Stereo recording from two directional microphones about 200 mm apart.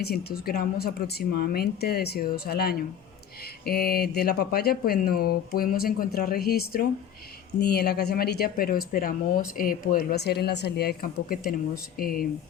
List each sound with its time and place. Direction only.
0.0 s speech: 50° left (ahead or behind)